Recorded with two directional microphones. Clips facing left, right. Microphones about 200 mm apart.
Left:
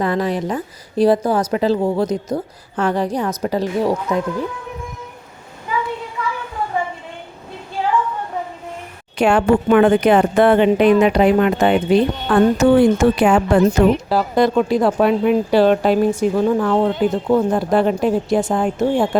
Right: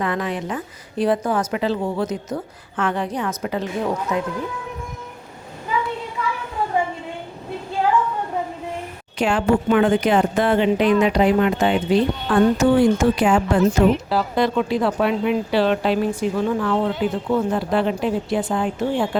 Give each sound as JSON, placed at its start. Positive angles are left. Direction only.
{"t": 0.0, "sound": "a woman's voice", "side_deg": 35}
{"t": 9.1, "sound": "speech", "side_deg": 60}
{"t": 14.1, "sound": "speech", "side_deg": 45}